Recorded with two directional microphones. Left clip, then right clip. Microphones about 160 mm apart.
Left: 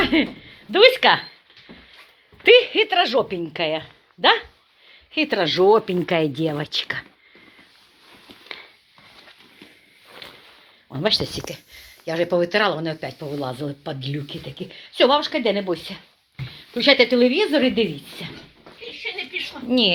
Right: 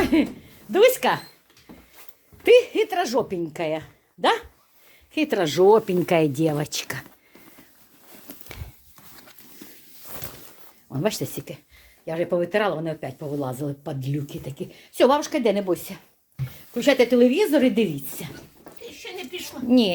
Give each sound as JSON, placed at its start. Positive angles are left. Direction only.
{"t": 0.0, "sound": "speech", "side_deg": -25}
{"t": 2.4, "sound": "a woman's voice", "side_deg": -15}
{"t": 10.8, "sound": "speech", "side_deg": -15}
{"t": 14.3, "sound": "speech", "side_deg": -25}
{"t": 19.6, "sound": "speech", "side_deg": -30}